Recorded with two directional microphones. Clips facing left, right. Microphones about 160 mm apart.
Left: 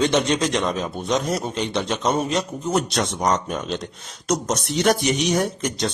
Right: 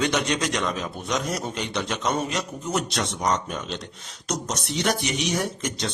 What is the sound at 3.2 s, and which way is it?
Speech, 45° left (ahead or behind).